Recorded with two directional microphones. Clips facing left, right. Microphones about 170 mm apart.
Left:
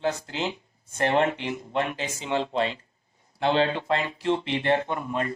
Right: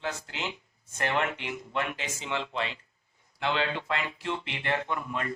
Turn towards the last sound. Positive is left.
turn(degrees=35)  # may be behind; listen again after turning